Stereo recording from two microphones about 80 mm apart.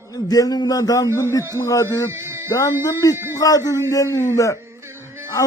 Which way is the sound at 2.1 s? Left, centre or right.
Right.